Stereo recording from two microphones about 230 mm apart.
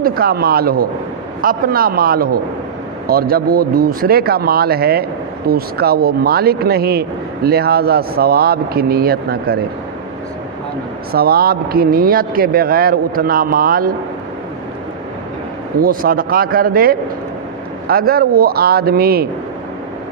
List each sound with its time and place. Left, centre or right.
0.0 s speech: right
11.1 s speech: right
15.8 s speech: right